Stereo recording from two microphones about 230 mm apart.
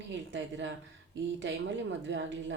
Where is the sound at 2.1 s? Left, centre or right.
Right.